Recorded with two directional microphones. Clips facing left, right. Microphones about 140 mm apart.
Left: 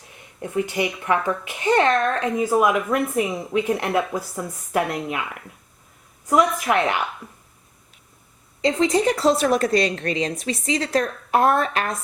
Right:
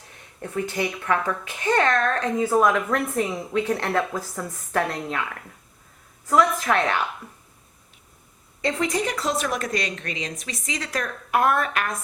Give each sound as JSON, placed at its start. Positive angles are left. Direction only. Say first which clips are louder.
{"t": 0.4, "sound": "speech", "louder": "left 3 dB", "side_deg": 15}
{"t": 8.6, "sound": "a woman's voice", "louder": "left 6 dB", "side_deg": 25}